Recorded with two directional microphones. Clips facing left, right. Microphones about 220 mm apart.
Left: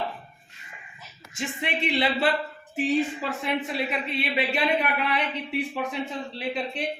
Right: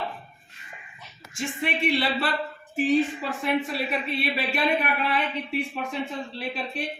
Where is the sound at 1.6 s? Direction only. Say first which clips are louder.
Right 1 dB; 20° left (ahead or behind).